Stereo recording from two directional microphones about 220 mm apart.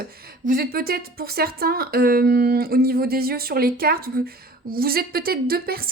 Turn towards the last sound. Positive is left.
turn(degrees=-40)  # may be behind; listen again after turning